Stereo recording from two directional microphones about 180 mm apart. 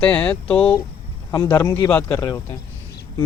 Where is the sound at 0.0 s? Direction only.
5° left (ahead or behind).